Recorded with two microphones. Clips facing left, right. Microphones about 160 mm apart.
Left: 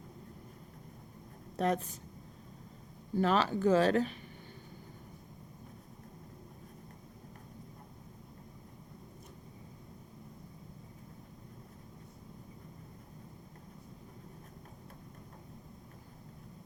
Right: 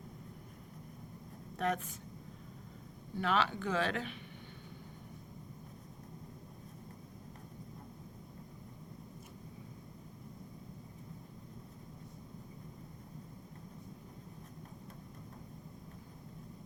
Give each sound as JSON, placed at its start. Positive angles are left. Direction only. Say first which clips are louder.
{"t": 1.5, "sound": "speech", "louder": "left 4 dB", "side_deg": 35}
{"t": 3.2, "sound": "speech", "louder": "left 4 dB", "side_deg": 40}